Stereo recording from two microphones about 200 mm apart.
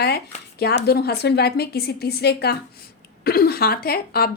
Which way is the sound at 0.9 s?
50° left (ahead or behind).